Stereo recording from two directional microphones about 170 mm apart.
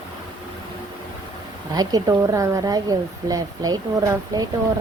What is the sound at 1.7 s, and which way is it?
Speech, 20° right (ahead or behind).